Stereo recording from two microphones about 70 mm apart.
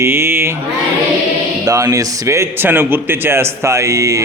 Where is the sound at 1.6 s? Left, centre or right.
Right.